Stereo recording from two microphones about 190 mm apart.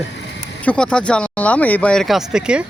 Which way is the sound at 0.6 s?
5° left (ahead or behind).